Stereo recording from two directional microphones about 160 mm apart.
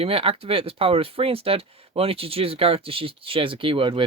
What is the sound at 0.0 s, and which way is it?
Speech, 35° right (ahead or behind).